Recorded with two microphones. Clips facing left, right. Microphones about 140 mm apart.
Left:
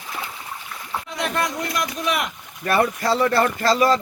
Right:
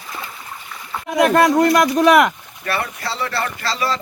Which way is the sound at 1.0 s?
65° right (ahead or behind).